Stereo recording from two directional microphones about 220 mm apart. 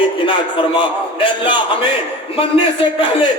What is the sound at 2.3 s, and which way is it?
Speech, 25° left (ahead or behind).